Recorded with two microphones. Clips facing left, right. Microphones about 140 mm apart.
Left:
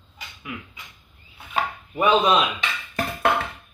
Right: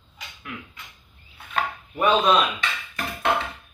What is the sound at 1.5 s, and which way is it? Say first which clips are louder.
Chopping: left 1 dB; 10° left (ahead or behind).